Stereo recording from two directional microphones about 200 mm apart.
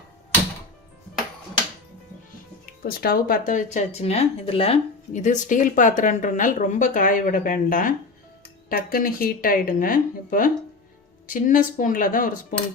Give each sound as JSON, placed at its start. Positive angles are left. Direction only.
{"t": 2.8, "sound": "speech", "side_deg": 50}